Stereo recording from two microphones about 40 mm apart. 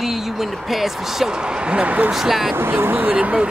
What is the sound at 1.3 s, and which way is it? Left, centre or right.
Speech, right.